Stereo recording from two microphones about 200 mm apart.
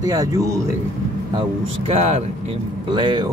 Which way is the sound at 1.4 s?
30° right (ahead or behind).